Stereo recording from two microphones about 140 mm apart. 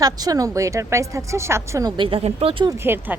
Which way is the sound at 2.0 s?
40° right (ahead or behind).